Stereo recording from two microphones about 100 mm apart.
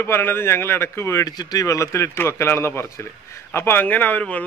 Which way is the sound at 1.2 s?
40° left (ahead or behind).